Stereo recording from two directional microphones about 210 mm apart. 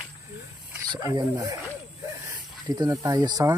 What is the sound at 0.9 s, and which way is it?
Speech, 20° right (ahead or behind).